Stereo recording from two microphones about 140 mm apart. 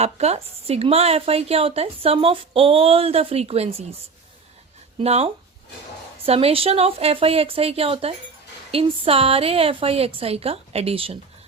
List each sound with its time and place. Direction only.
0.0 s a woman's voice: 50° right (ahead or behind)
4.9 s a woman's voice: 45° right (ahead or behind)